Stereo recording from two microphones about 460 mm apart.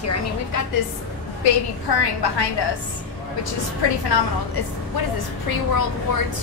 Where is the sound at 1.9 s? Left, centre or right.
Left.